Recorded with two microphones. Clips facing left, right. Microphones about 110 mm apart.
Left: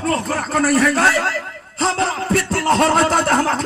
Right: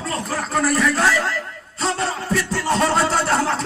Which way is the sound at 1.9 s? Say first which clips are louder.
Left 4 dB; 70° left (ahead or behind).